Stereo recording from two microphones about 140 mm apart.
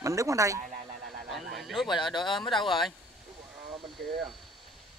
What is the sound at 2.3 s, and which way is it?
Speech, centre (ahead or behind).